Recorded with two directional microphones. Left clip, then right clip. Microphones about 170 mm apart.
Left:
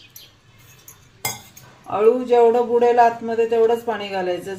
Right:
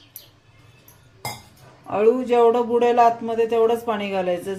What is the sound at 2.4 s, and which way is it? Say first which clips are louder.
A man's voice: left 1 dB; 20° right (ahead or behind).